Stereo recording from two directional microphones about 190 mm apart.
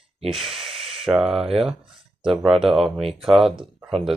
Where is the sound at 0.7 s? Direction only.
30° right (ahead or behind).